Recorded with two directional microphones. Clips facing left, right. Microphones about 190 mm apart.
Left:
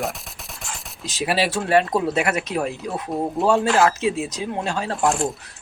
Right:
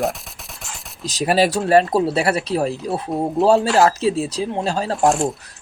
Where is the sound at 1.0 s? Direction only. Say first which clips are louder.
Right 5 dB; 40° right (ahead or behind).